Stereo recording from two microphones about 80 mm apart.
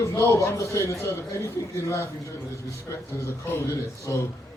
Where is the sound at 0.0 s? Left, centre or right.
Left.